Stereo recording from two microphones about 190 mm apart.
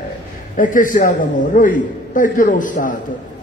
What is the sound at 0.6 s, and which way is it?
A man's voice, 45° left (ahead or behind).